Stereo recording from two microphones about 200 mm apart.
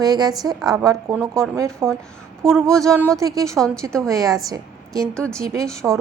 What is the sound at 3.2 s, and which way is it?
Speech, 15° right (ahead or behind).